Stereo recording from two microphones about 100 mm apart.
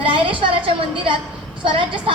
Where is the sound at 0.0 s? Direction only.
65° right (ahead or behind).